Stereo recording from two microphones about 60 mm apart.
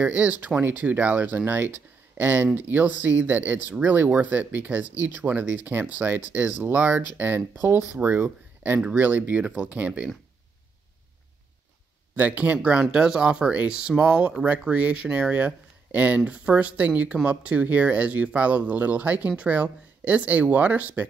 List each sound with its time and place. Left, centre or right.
0.0 s speech: right
12.2 s speech: right
12.9 s speech: centre; by 21.0 s right